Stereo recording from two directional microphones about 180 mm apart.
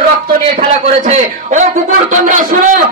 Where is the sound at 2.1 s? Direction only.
45° right (ahead or behind).